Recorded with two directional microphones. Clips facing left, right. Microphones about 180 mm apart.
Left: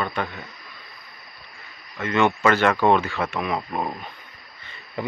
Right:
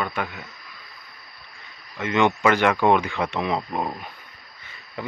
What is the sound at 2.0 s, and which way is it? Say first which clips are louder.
Speech: even; 15° right (ahead or behind).